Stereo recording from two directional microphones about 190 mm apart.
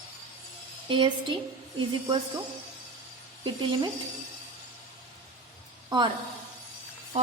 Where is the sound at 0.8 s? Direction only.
25° right (ahead or behind).